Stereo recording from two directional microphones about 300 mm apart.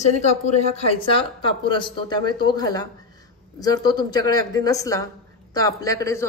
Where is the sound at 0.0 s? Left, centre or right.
Left.